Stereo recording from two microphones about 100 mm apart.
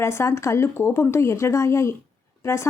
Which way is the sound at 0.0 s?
25° left (ahead or behind).